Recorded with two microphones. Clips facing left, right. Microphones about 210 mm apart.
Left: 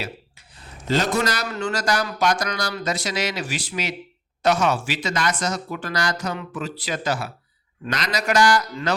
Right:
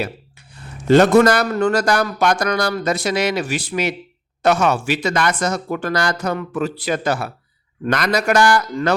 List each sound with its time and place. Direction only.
0.9 s speech: 60° right (ahead or behind)